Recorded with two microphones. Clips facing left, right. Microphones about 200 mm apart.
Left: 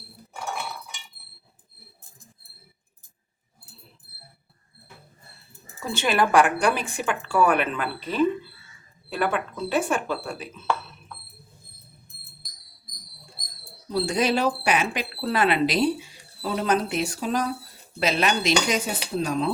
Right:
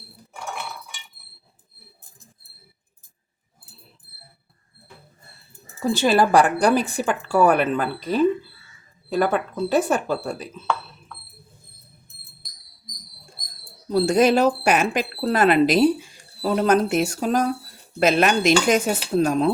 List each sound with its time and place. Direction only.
5.8 s a woman's voice: 35° right (ahead or behind)
12.4 s a sound: centre (ahead or behind)
13.9 s speech: 45° right (ahead or behind)